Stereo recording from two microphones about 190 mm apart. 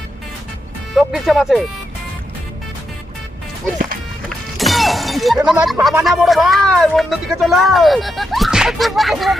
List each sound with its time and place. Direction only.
0.9 s speech: centre (ahead or behind)
4.3 s shatter: centre (ahead or behind)
5.8 s speech: centre (ahead or behind)